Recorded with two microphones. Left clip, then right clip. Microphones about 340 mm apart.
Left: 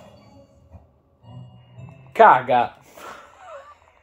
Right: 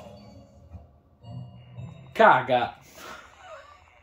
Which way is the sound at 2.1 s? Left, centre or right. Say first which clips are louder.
Left 5 dB; centre.